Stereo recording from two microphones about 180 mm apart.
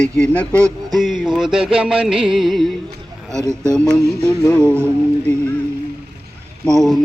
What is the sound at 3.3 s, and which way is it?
Speech, 15° right (ahead or behind).